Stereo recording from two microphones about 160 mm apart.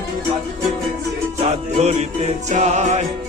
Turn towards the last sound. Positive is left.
turn(degrees=-45)  # may be behind; listen again after turning